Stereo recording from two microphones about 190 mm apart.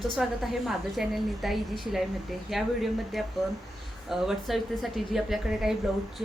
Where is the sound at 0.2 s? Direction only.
5° right (ahead or behind).